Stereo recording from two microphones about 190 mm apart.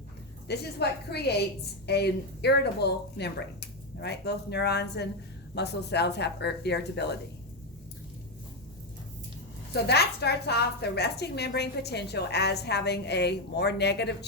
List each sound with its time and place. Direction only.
0.4 s a woman's voice: 60° left (ahead or behind)
9.7 s a woman's voice: 60° left (ahead or behind)